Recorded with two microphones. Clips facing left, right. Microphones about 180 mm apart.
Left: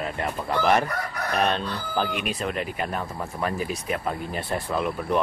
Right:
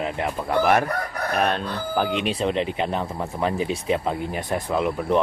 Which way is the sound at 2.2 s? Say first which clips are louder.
Right 5 dB; 30° right (ahead or behind).